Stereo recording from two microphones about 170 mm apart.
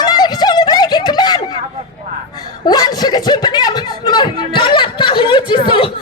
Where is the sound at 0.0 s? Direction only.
25° left (ahead or behind).